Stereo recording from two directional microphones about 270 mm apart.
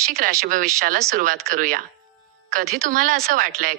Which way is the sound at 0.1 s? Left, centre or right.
Right.